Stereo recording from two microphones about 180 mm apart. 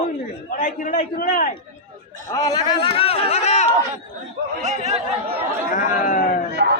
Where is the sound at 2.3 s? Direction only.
20° left (ahead or behind); by 3.7 s 40° left (ahead or behind).